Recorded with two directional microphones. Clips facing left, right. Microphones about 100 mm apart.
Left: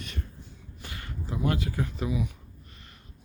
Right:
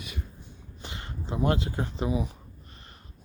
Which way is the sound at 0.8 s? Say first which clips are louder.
Right 1 dB; 25° right (ahead or behind).